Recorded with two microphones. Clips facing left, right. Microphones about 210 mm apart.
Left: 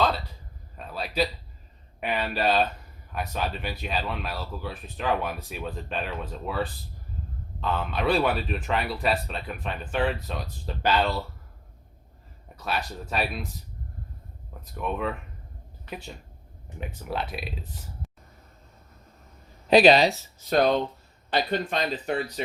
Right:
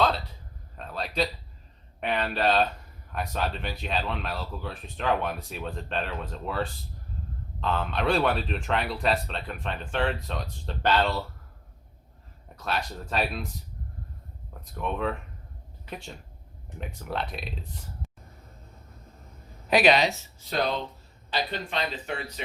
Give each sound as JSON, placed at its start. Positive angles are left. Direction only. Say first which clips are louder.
{"t": 0.8, "sound": "a sound", "louder": "left 1 dB", "side_deg": 5}
{"t": 2.0, "sound": "speech", "louder": "even", "side_deg": 5}
{"t": 12.5, "sound": "speech", "louder": "even", "side_deg": 5}
{"t": 14.6, "sound": "speech", "louder": "even", "side_deg": 5}
{"t": 19.6, "sound": "speech", "louder": "left 4 dB", "side_deg": 30}
{"t": 20.5, "sound": "speech", "louder": "left 6 dB", "side_deg": 50}